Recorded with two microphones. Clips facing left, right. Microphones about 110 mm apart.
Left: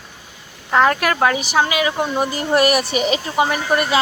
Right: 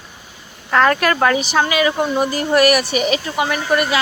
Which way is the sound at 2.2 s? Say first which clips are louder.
Right 1 dB; 20° left (ahead or behind).